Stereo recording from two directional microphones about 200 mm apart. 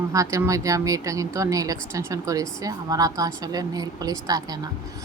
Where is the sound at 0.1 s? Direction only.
15° right (ahead or behind).